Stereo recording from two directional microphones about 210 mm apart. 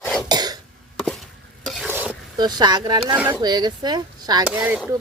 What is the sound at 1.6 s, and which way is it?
Stir, centre (ahead or behind).